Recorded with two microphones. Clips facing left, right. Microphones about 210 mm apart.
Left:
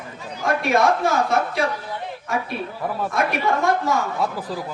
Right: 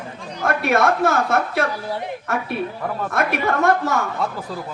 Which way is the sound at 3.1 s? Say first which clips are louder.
Right 1 dB; 60° right (ahead or behind).